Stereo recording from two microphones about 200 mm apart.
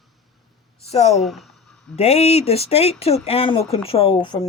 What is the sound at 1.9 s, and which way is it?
A woman's voice, 30° left (ahead or behind).